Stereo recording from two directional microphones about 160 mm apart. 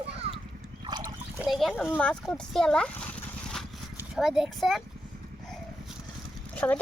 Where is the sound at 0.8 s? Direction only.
30° right (ahead or behind).